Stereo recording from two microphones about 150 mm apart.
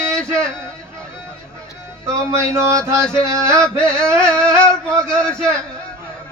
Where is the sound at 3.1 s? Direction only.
5° left (ahead or behind).